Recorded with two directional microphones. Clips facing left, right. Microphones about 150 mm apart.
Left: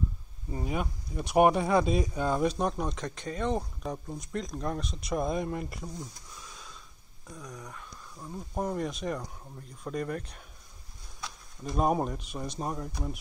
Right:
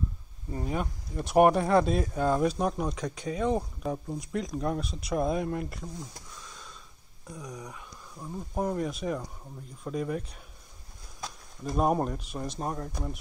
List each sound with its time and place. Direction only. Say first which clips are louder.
0.5 s speech: right 1 dB; 10° left (ahead or behind)
7.6 s speech: right 1 dB; 5° right (ahead or behind)
11.1 s a sound: right 2 dB; 40° right (ahead or behind)
11.7 s speech: right 1 dB; centre (ahead or behind)